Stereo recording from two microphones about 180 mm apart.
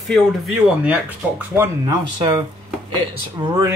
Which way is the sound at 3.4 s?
20° right (ahead or behind).